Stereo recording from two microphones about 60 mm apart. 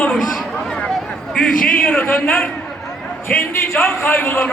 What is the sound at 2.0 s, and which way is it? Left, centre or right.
Speech, left.